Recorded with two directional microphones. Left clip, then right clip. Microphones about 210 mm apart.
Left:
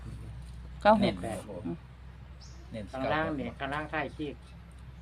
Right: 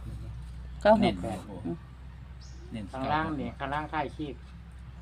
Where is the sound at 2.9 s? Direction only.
15° left (ahead or behind).